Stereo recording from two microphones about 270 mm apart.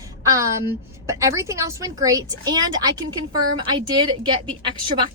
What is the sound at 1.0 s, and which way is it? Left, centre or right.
A woman's voice, centre.